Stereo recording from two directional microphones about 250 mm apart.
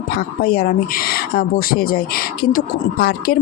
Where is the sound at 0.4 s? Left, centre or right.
Left.